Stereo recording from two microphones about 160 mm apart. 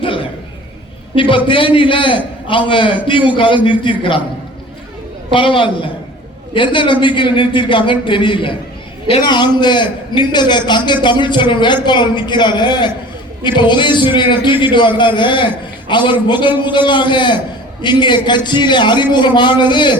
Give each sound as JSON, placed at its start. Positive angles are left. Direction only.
{"t": 0.0, "sound": "a sound", "side_deg": 35}
{"t": 1.1, "sound": "a man's voice", "side_deg": 30}
{"t": 5.3, "sound": "a man's voice", "side_deg": 30}